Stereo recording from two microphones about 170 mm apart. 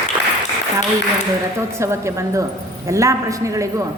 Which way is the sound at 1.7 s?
15° right (ahead or behind).